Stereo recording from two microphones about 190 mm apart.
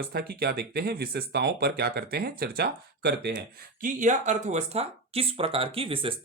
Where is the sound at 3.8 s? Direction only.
45° right (ahead or behind).